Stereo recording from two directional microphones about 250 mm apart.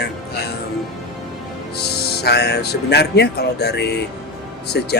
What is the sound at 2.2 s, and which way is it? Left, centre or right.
Speech, left.